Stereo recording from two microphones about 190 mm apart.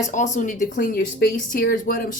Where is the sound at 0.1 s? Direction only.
40° left (ahead or behind).